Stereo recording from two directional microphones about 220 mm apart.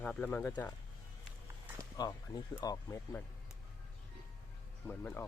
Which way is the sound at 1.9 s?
15° left (ahead or behind).